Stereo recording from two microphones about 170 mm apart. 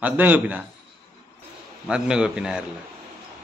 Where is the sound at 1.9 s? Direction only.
5° right (ahead or behind).